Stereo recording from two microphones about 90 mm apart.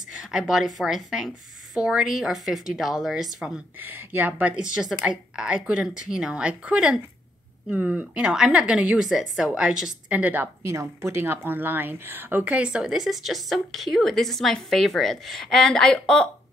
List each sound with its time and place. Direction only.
0.1 s speech: 10° right (ahead or behind)
3.8 s a woman's voice: 20° right (ahead or behind)
10.1 s a woman's voice: 20° right (ahead or behind)
10.6 s speech: 35° right (ahead or behind); by 16.3 s 10° left (ahead or behind)